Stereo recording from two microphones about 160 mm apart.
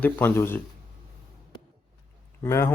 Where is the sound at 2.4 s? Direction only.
20° left (ahead or behind).